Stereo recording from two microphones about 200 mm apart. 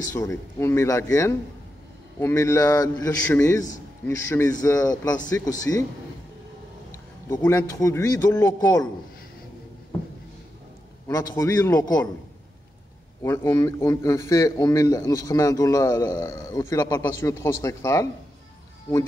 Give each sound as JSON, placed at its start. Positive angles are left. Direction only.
{"t": 0.1, "sound": "a man's voice", "side_deg": 15}
{"t": 7.2, "sound": "a man's voice", "side_deg": 15}
{"t": 11.1, "sound": "a man's voice", "side_deg": 15}
{"t": 13.2, "sound": "a man's voice", "side_deg": 10}